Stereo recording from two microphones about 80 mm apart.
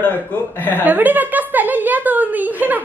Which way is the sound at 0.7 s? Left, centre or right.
Right.